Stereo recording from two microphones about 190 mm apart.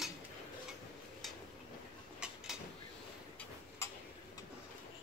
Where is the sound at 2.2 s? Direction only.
5° right (ahead or behind).